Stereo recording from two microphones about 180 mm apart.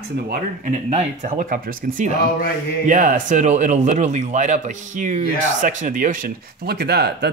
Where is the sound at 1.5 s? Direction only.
50° right (ahead or behind).